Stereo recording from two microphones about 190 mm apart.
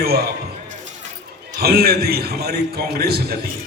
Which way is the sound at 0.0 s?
55° right (ahead or behind).